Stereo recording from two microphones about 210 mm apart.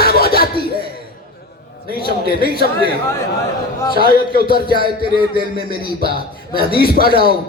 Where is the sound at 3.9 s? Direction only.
45° left (ahead or behind).